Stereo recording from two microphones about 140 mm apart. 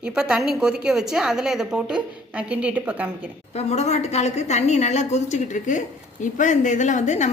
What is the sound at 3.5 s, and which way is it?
A woman's voice, 50° left (ahead or behind).